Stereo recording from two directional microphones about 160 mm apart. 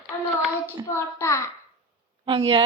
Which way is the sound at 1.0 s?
15° left (ahead or behind).